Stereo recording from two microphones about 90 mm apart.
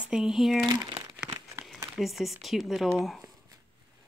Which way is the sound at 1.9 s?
Centre (ahead or behind).